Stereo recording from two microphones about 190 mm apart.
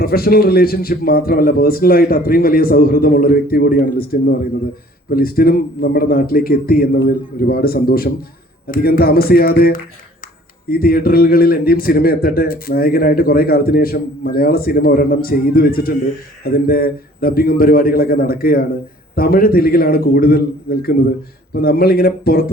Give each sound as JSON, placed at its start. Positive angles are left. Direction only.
{"t": 0.0, "sound": "a man's voice", "side_deg": 55}